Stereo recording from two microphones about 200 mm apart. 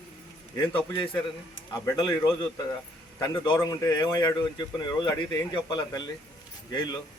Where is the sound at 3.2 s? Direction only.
20° left (ahead or behind).